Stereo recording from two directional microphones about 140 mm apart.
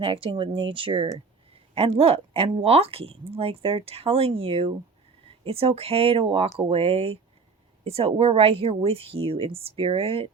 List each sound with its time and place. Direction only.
0.0 s speech: 40° right (ahead or behind)